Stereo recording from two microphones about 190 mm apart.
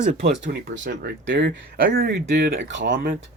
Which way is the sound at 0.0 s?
45° right (ahead or behind).